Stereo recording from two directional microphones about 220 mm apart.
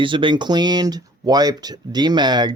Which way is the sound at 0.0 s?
20° right (ahead or behind).